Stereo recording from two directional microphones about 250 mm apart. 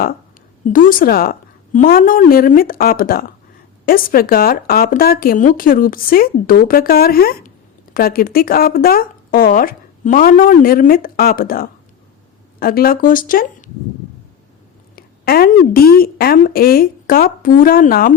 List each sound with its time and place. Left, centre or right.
0.6 s speech: left
14.9 s a woman's voice: left